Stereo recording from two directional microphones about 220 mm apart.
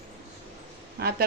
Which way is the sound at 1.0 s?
45° right (ahead or behind).